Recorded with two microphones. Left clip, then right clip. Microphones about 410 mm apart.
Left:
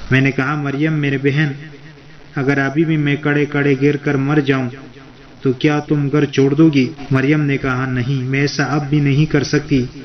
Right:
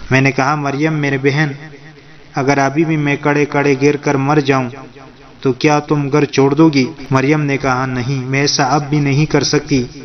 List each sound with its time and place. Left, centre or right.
0.1 s a man's voice: centre